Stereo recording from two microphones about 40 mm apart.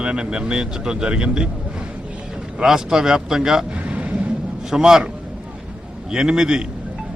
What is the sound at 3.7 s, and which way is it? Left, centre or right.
Vehicle, right.